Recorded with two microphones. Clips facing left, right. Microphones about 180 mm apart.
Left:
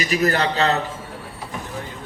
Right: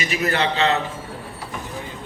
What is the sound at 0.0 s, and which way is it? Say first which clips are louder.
Speech: left 2 dB; 40° left (ahead or behind).